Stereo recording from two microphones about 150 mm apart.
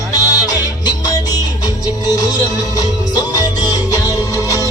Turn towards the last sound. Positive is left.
turn(degrees=20)  # may be behind; listen again after turning